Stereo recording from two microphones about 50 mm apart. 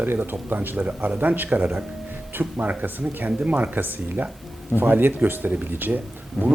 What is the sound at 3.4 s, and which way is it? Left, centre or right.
Speech, right.